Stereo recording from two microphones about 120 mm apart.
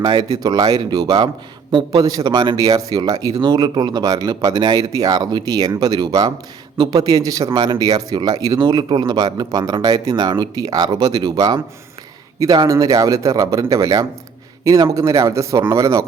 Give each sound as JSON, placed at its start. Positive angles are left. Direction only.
{"t": 0.0, "sound": "a man's voice", "side_deg": -35}